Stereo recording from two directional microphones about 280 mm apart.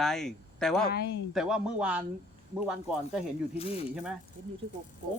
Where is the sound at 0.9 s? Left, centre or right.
Left.